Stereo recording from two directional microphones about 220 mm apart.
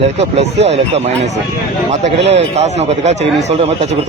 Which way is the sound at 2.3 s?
30° right (ahead or behind).